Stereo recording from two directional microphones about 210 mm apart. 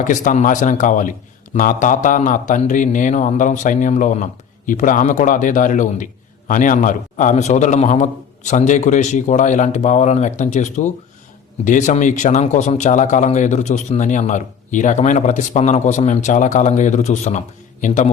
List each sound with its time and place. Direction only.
0.0 s speech: 35° left (ahead or behind)